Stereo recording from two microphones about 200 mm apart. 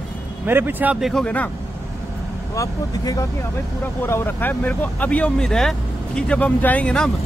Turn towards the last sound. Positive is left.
turn(degrees=5)  # may be behind; listen again after turning